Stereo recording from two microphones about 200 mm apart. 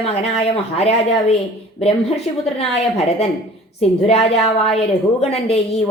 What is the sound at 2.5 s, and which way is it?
Speech, 30° left (ahead or behind).